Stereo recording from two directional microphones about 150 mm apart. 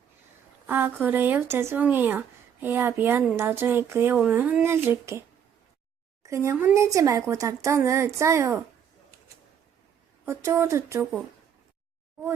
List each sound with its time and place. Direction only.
0.7 s speech: 15° right (ahead or behind)
6.2 s a woman's voice: 20° right (ahead or behind)
10.2 s a woman's voice: 20° right (ahead or behind)